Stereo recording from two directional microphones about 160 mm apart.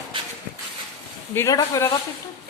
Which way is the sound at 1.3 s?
20° left (ahead or behind).